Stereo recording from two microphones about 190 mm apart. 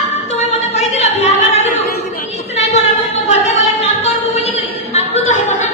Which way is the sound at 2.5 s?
35° left (ahead or behind).